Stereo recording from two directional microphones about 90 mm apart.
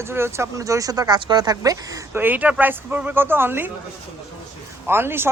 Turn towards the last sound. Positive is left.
turn(degrees=-25)  # may be behind; listen again after turning